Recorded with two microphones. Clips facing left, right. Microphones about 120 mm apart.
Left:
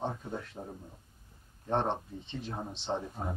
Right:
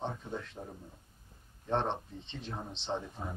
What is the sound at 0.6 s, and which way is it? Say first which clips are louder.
Speech: left 2 dB; 15° left (ahead or behind).